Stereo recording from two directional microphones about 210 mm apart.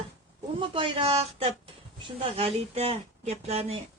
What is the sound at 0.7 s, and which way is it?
Speech, 25° right (ahead or behind).